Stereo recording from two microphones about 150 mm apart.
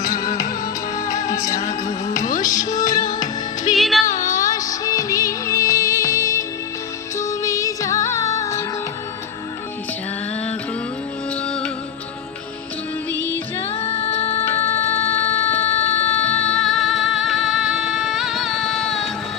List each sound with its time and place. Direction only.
0.9 s music: 20° left (ahead or behind)
2.0 s music: 60° left (ahead or behind)
2.5 s music: 25° left (ahead or behind)
3.0 s music: 60° left (ahead or behind)
3.8 s music: centre (ahead or behind)
4.3 s music: 25° left (ahead or behind)
11.4 s music: 5° left (ahead or behind)
13.7 s music: 40° left (ahead or behind)
15.6 s a sound: 45° left (ahead or behind)
16.1 s music: 10° left (ahead or behind)